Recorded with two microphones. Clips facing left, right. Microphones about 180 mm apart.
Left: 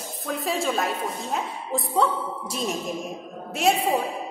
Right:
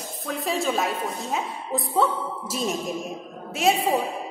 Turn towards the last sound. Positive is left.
turn(degrees=0)  # may be behind; listen again after turning